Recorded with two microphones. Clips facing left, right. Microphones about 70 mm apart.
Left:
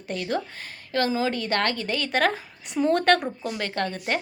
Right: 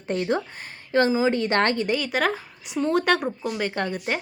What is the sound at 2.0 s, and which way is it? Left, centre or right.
Speech, centre.